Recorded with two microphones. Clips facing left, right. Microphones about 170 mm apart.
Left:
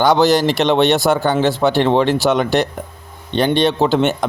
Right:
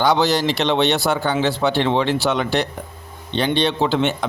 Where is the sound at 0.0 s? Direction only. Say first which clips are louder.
Left 4 dB; 45° left (ahead or behind).